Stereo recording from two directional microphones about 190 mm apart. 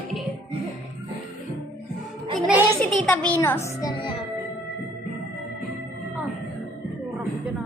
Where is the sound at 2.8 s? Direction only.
10° left (ahead or behind).